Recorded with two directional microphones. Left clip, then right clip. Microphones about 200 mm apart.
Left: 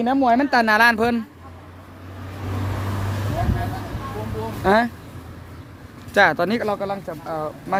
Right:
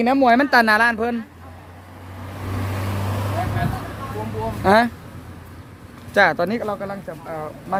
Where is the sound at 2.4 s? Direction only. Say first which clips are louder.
Right 1 dB; 60° right (ahead or behind).